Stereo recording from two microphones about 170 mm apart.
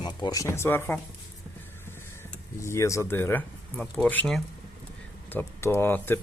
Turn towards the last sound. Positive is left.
turn(degrees=15)  # may be behind; listen again after turning